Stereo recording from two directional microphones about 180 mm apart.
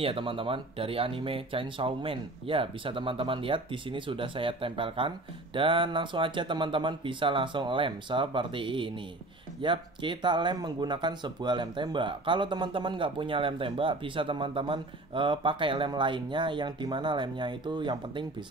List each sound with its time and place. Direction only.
0.0 s speech: 30° right (ahead or behind)